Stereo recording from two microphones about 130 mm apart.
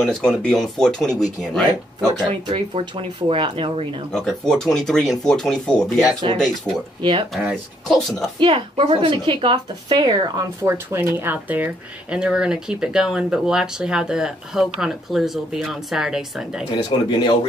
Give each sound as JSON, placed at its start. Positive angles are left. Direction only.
{"t": 0.0, "sound": "speech", "side_deg": 5}
{"t": 2.5, "sound": "speech", "side_deg": -45}
{"t": 4.1, "sound": "speech", "side_deg": 5}
{"t": 7.0, "sound": "speech", "side_deg": -40}
{"t": 7.3, "sound": "speech", "side_deg": 0}
{"t": 8.4, "sound": "a woman's voice", "side_deg": -40}
{"t": 16.7, "sound": "speech", "side_deg": 35}